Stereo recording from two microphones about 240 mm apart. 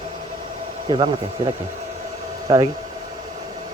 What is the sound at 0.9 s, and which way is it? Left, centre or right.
Speech, centre.